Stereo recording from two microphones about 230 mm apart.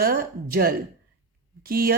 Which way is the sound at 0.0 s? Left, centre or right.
Right.